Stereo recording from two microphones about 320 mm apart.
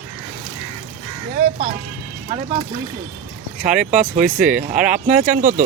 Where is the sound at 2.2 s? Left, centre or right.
Centre.